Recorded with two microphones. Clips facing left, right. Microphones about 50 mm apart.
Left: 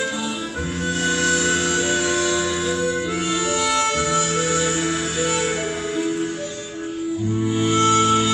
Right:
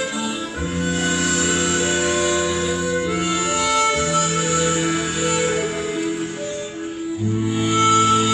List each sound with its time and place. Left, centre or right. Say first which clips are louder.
1.0 s music: left 3 dB; centre
3.7 s music: right 2 dB; centre
7.5 s music: left 1 dB; centre
7.8 s music: right 2 dB; centre